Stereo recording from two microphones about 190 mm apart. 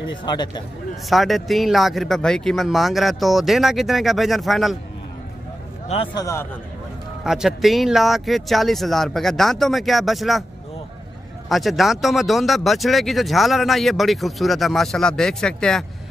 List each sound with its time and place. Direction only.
0.2 s speech: 25° left (ahead or behind)
1.0 s speech: centre (ahead or behind)
6.1 s a man's voice: 15° left (ahead or behind)
7.2 s speech: centre (ahead or behind)
11.4 s speech: centre (ahead or behind)